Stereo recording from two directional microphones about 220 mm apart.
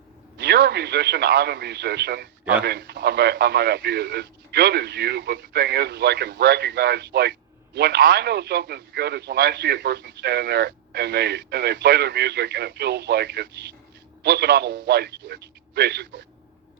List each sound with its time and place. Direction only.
0.3 s a man's voice: 50° right (ahead or behind)